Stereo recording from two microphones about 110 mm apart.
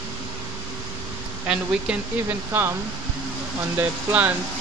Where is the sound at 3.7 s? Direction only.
15° right (ahead or behind).